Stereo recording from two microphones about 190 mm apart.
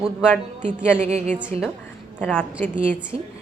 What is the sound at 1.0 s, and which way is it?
Speech, 35° right (ahead or behind).